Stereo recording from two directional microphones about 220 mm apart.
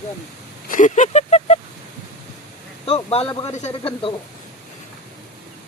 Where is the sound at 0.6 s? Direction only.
35° left (ahead or behind).